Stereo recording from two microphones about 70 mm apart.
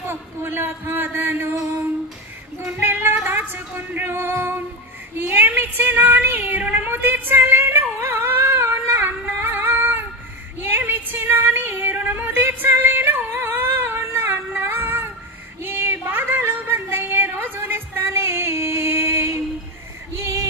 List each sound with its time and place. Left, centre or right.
0.1 s a man's voice: right
2.8 s child singing: right
3.3 s music: right
5.1 s child singing: right
10.6 s music: right
15.6 s a sound: right
20.2 s female singing: right